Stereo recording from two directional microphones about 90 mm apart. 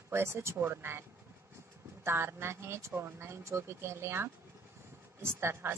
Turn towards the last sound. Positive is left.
turn(degrees=-25)  # may be behind; listen again after turning